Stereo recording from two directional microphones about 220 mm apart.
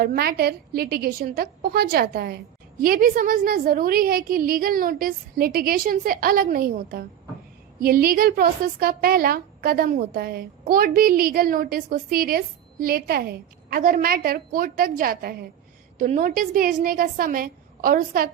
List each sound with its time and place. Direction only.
0.0 s a woman's voice: 45° right (ahead or behind)